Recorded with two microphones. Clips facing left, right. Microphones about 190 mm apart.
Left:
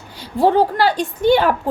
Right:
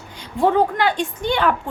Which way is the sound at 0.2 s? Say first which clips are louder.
Left 2 dB; 35° left (ahead or behind).